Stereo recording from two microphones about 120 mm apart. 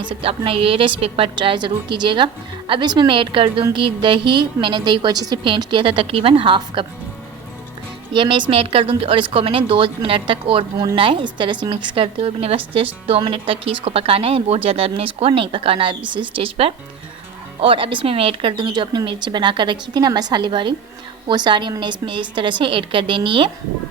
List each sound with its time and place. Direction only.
0.0 s a woman's voice: 45° right (ahead or behind)
8.1 s a woman's voice: 45° right (ahead or behind)